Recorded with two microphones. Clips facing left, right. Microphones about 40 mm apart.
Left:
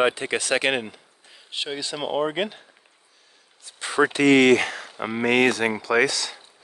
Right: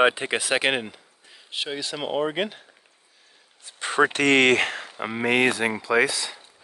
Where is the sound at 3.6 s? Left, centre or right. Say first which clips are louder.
Even; right.